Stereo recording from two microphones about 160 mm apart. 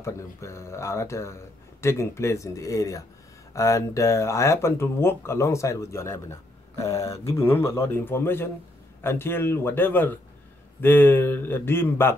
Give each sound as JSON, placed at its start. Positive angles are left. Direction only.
{"t": 0.0, "sound": "speech", "side_deg": 20}